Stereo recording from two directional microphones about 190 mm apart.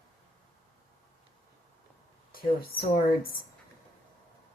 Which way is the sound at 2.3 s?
50° left (ahead or behind).